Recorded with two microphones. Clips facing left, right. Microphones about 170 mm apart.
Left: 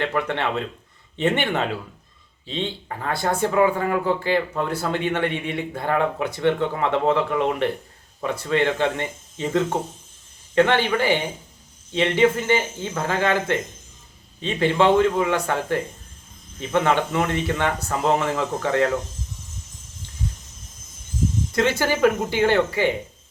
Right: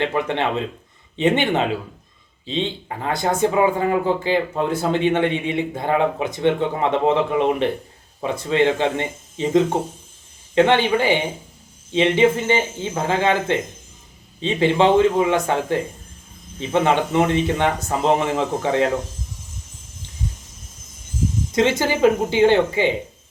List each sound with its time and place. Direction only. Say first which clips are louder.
0.0 s speech: right 3 dB; 20° right (ahead or behind)
21.5 s speech: right 3 dB; 20° right (ahead or behind)